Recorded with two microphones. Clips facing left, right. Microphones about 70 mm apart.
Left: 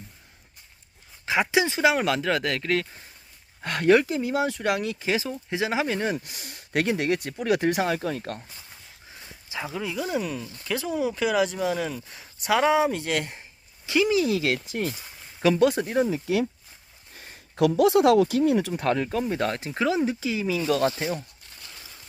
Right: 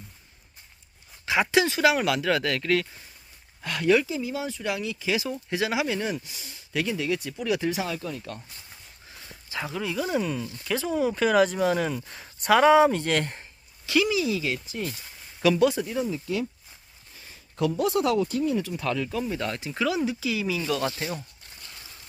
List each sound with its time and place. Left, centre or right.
1.4 s speech: centre
3.6 s speech: left
5.5 s speech: left
6.2 s speech: left
9.5 s speech: centre
13.8 s speech: left
14.1 s speech: left
15.6 s speech: left
16.0 s speech: left
17.2 s a sound: left
17.7 s speech: left
18.7 s speech: left
20.1 s speech: left